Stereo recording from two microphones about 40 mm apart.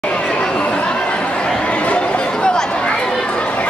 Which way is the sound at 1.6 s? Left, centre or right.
Left.